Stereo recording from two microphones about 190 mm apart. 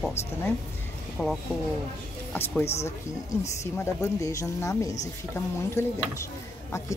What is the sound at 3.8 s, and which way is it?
A woman's voice, 15° left (ahead or behind).